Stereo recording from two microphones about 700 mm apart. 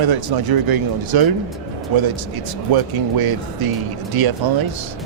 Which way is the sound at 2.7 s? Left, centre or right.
Right.